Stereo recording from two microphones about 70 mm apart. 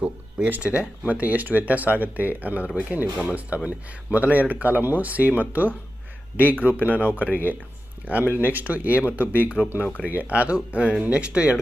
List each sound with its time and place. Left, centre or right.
0.0 s speech: centre
7.1 s speech: left
8.0 s speech: right